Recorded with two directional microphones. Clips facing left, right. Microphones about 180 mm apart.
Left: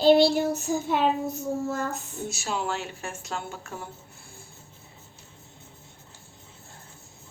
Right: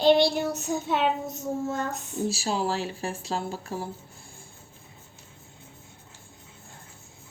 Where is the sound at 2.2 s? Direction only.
30° right (ahead or behind).